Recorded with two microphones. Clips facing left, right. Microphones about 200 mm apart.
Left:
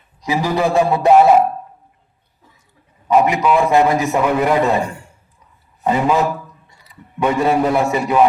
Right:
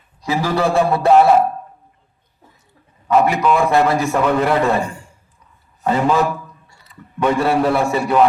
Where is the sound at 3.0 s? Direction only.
15° left (ahead or behind).